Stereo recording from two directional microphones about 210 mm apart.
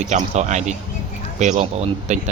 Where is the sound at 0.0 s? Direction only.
35° right (ahead or behind).